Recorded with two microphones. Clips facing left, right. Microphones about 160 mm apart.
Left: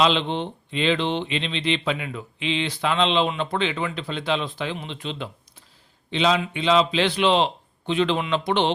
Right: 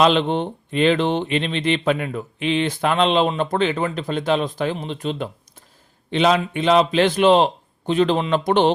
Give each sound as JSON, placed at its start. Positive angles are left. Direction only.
{"t": 0.0, "sound": "speech", "side_deg": -50}